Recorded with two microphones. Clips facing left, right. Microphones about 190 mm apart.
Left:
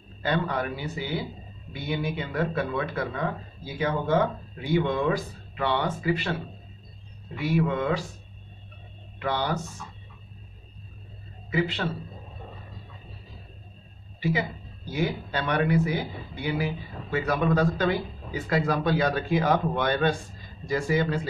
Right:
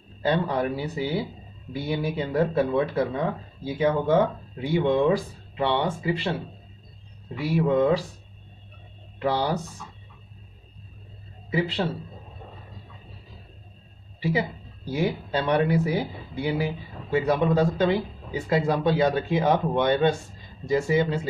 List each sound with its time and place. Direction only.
0.2 s speech: 30° right (ahead or behind)
7.3 s speech: 35° right (ahead or behind)
9.2 s speech: 30° right (ahead or behind)
11.5 s speech: 30° right (ahead or behind)
14.9 s speech: 30° right (ahead or behind)